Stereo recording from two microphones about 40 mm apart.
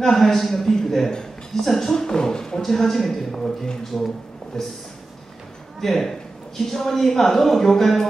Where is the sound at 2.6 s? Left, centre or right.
Centre.